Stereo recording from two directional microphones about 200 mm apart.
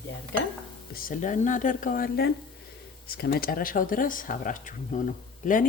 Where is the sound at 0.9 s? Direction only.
45° left (ahead or behind).